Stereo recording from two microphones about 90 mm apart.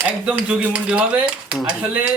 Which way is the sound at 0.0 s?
10° right (ahead or behind).